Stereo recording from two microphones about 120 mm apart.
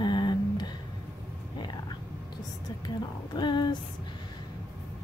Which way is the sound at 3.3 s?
40° left (ahead or behind).